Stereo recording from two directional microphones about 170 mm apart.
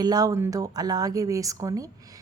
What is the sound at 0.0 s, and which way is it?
A woman's voice, 25° right (ahead or behind).